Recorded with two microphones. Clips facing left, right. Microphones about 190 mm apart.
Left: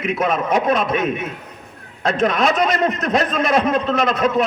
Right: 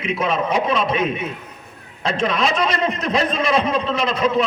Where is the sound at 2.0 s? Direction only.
45° left (ahead or behind).